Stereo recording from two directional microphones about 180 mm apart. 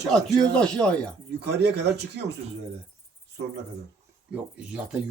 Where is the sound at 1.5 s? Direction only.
70° right (ahead or behind).